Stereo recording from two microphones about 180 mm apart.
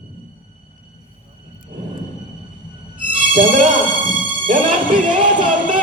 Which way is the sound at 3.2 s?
45° right (ahead or behind).